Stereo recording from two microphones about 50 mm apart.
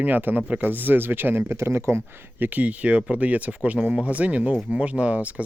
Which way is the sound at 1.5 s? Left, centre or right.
Right.